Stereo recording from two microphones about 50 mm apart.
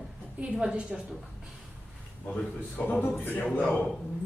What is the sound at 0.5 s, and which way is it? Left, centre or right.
Speech, centre.